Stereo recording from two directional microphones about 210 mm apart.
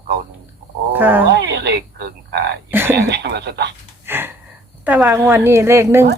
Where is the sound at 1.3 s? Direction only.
55° right (ahead or behind).